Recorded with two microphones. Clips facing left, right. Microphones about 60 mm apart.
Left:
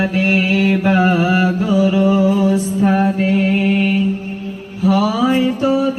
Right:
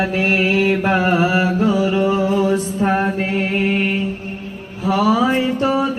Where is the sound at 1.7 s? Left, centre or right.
Centre.